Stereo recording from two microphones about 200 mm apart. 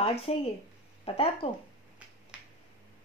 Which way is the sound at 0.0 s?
30° left (ahead or behind).